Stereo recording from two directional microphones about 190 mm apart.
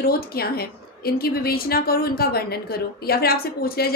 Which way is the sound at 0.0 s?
55° left (ahead or behind).